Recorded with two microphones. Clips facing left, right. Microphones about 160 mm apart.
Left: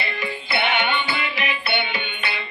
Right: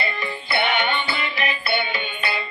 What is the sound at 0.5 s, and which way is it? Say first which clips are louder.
Music: right 1 dB; 40° right (ahead or behind).